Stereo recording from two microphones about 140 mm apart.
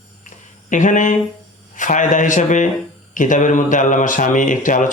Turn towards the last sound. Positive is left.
turn(degrees=70)  # may be behind; listen again after turning